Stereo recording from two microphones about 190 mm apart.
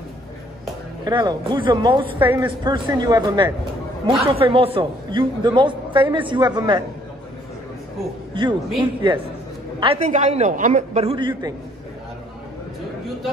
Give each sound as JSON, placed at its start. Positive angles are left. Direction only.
{"t": 1.0, "sound": "a man's voice", "side_deg": -20}
{"t": 8.4, "sound": "a man's voice", "side_deg": -25}